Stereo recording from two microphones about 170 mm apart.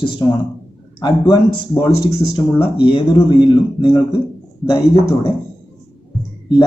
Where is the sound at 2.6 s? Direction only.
30° left (ahead or behind).